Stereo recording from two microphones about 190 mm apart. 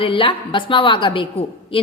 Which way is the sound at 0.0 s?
30° left (ahead or behind).